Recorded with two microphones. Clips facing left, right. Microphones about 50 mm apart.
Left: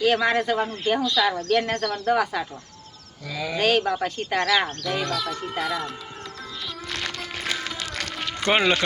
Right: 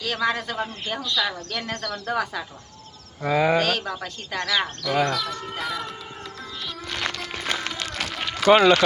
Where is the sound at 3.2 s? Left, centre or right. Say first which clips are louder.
Right 10 dB; right.